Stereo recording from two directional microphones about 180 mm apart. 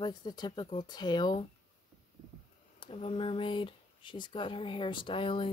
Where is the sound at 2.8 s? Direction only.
30° left (ahead or behind).